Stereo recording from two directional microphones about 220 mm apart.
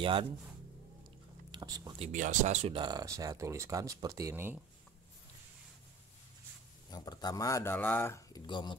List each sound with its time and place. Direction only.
0.0 s speech: 25° right (ahead or behind)
1.5 s speech: 20° right (ahead or behind)
2.1 s speech: 35° right (ahead or behind); by 4.6 s 10° right (ahead or behind)
6.9 s speech: 20° left (ahead or behind)